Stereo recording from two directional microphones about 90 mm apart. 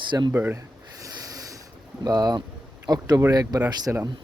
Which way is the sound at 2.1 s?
50° right (ahead or behind).